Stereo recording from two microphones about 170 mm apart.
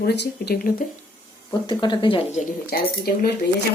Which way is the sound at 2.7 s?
65° left (ahead or behind).